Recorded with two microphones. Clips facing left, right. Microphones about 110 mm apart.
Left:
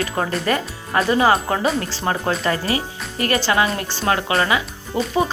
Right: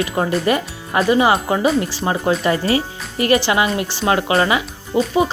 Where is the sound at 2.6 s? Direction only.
25° right (ahead or behind).